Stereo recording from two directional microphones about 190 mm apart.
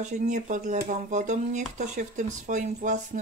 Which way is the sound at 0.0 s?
40° right (ahead or behind).